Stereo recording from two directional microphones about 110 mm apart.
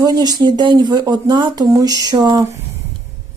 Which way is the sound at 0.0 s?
40° right (ahead or behind).